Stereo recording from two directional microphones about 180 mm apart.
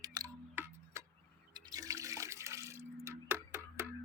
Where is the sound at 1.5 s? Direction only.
20° right (ahead or behind).